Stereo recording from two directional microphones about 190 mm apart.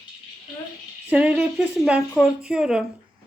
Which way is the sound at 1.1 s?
5° right (ahead or behind).